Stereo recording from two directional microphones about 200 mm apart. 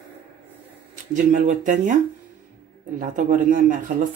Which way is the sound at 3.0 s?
40° right (ahead or behind).